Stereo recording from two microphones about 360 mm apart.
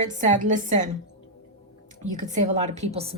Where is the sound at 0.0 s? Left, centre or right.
Centre.